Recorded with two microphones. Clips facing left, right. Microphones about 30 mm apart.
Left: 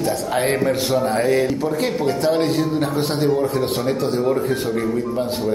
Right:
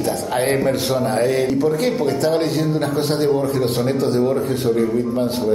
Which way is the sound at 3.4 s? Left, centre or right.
Left.